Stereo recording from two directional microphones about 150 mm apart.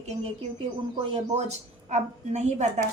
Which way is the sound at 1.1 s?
50° right (ahead or behind).